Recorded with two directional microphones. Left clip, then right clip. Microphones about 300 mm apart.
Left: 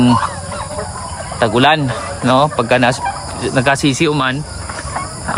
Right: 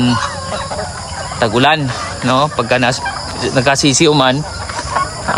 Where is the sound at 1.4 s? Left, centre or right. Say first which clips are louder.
Even; centre.